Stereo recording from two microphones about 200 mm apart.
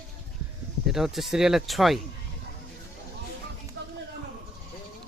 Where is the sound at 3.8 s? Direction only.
60° right (ahead or behind).